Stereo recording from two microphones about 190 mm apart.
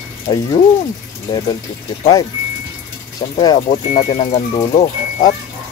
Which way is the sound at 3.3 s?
25° left (ahead or behind).